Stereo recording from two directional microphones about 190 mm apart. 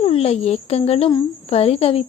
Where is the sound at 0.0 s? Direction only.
30° left (ahead or behind).